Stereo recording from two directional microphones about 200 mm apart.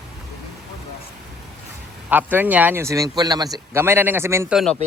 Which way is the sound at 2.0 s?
10° right (ahead or behind).